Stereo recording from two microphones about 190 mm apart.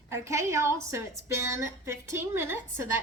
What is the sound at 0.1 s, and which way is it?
Speech, 15° right (ahead or behind).